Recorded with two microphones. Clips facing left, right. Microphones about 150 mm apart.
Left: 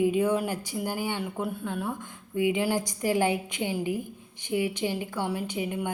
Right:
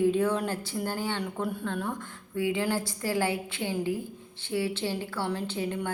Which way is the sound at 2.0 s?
15° left (ahead or behind).